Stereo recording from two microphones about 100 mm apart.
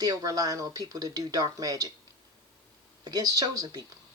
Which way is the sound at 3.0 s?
40° right (ahead or behind).